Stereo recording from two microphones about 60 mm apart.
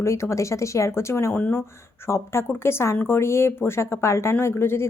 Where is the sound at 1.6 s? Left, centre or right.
Left.